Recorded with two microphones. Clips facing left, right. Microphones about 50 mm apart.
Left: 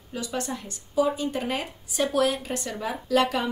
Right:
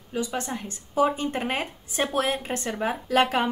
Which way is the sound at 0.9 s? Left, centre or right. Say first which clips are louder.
Right 1 dB; right.